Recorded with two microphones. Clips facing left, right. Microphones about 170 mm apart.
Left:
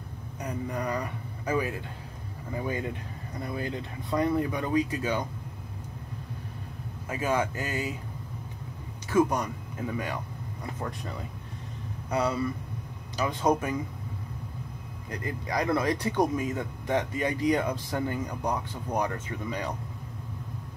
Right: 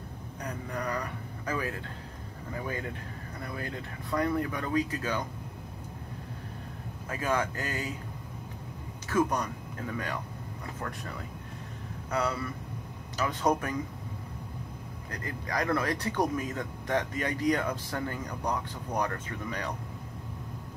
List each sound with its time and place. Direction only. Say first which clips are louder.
0.4 s speech: left 4 dB; 10° left (ahead or behind)
7.1 s speech: left 2 dB; 15° left (ahead or behind)
9.1 s speech: left 3 dB; 10° left (ahead or behind)
12.1 s speech: left 4 dB; 15° left (ahead or behind)
15.0 s speech: left 4 dB; 15° left (ahead or behind)